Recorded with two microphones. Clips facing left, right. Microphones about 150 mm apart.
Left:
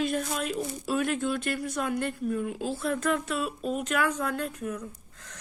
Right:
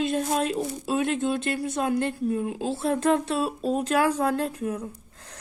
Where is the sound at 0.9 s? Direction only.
25° right (ahead or behind).